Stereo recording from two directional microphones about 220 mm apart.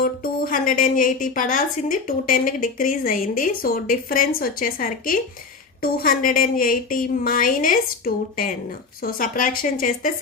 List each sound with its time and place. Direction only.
0.0 s a woman's voice: 40° left (ahead or behind)